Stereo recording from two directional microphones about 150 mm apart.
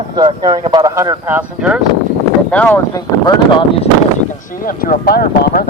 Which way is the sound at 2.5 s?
10° left (ahead or behind).